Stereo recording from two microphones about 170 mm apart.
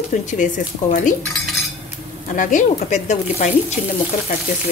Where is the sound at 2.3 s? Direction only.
50° left (ahead or behind).